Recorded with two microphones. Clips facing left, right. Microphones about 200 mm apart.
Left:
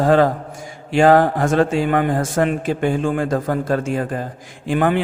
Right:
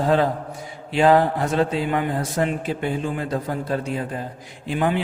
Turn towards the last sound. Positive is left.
turn(degrees=50)  # may be behind; listen again after turning